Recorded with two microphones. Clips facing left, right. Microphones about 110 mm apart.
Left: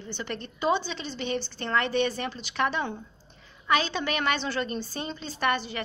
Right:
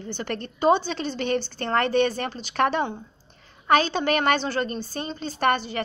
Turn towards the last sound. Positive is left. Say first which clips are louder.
# right 4 dB
turn(degrees=-45)  # may be behind; listen again after turning